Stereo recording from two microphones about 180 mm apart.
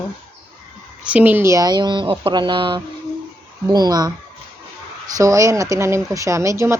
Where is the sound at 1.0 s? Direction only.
10° right (ahead or behind).